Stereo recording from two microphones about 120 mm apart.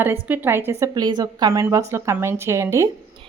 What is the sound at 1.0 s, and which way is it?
Speech, 35° right (ahead or behind).